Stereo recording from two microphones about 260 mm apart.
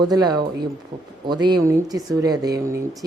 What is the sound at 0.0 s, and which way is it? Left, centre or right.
Speech, centre.